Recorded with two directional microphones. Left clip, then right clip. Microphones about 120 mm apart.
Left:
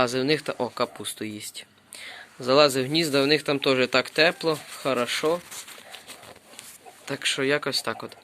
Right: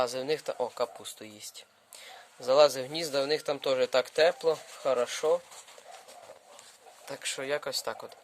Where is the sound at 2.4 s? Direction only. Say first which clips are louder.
Left 3 dB; 20° right (ahead or behind).